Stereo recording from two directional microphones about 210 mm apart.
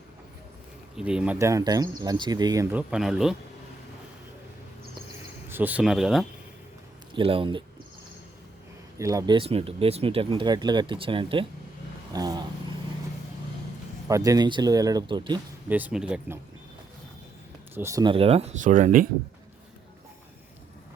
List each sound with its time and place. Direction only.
0.9 s speech: 5° right (ahead or behind)
2.7 s speech: 5° right (ahead or behind)
5.5 s speech: 10° right (ahead or behind)
7.1 s speech: 25° right (ahead or behind)
9.0 s speech: 15° right (ahead or behind)
12.1 s vehicle: 20° right (ahead or behind)
14.1 s speech: 15° right (ahead or behind)
15.7 s speech: 5° right (ahead or behind)
17.7 s speech: 15° right (ahead or behind); by 19.0 s 40° right (ahead or behind)